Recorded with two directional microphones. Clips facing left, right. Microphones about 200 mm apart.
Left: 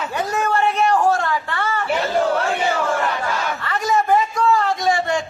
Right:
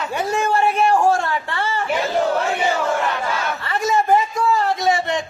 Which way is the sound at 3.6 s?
25° right (ahead or behind).